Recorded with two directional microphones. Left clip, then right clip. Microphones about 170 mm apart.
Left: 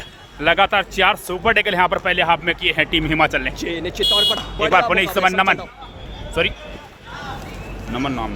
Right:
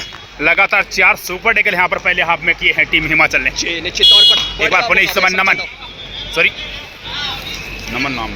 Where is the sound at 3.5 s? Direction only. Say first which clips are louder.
Right 6 dB; 80° left.